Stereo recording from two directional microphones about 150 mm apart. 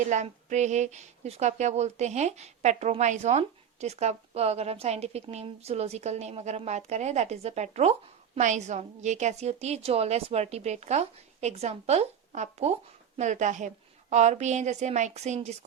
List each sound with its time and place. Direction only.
0.1 s speech: 50° right (ahead or behind)